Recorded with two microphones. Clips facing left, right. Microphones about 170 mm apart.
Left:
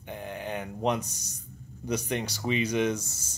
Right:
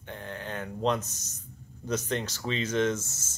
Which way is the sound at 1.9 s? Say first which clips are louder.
Even; 15° left (ahead or behind).